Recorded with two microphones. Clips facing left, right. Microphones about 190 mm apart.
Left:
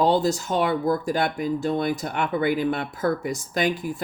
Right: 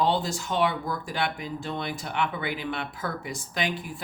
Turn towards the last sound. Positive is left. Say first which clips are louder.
# left 7 dB
turn(degrees=45)  # may be behind; listen again after turning